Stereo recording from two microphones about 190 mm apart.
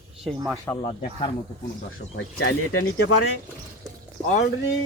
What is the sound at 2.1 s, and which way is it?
Speech, 85° left.